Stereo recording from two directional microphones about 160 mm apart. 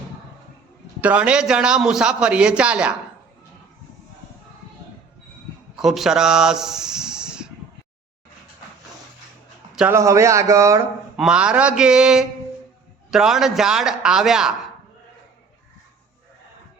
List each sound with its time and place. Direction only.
1.0 s a man's voice: 10° right (ahead or behind)
5.7 s speech: centre (ahead or behind)
9.9 s speech: 20° right (ahead or behind)
11.2 s a man's voice: 5° right (ahead or behind)